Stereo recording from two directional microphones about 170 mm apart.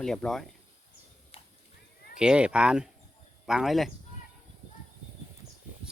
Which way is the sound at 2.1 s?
5° right (ahead or behind).